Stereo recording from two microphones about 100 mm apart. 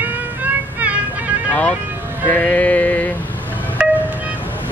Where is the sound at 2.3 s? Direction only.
15° left (ahead or behind).